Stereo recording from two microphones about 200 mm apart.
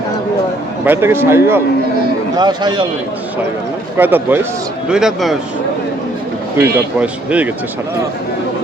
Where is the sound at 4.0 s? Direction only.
10° right (ahead or behind).